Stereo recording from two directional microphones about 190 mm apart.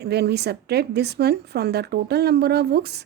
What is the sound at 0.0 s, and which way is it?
A woman's voice, 60° right (ahead or behind).